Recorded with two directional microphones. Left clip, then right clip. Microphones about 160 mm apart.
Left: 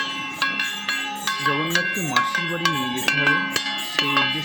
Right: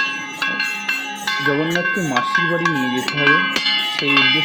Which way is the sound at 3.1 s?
50° left (ahead or behind).